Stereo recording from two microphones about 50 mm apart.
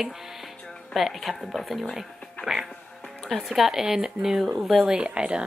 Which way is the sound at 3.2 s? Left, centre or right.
Centre.